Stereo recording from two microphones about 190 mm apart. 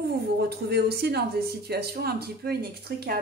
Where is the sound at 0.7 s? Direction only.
60° right (ahead or behind).